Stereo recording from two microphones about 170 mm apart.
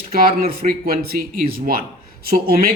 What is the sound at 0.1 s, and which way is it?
Speech, 60° right (ahead or behind).